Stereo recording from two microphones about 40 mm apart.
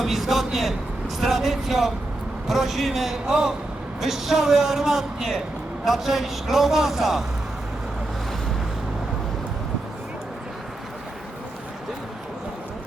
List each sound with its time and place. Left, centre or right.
0.0 s speech: centre
3.2 s a man's voice: centre